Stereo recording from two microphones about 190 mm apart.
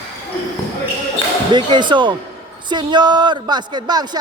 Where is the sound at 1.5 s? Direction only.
25° right (ahead or behind).